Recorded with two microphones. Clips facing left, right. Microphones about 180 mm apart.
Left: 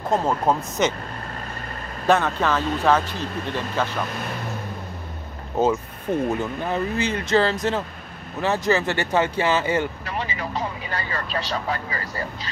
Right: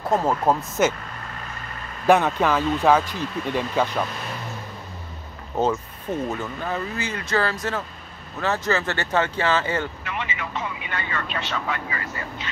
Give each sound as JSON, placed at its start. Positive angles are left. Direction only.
{"t": 0.1, "sound": "speech", "side_deg": 0}
{"t": 2.0, "sound": "speech", "side_deg": -15}
{"t": 6.2, "sound": "speech", "side_deg": 15}
{"t": 10.0, "sound": "speech", "side_deg": 35}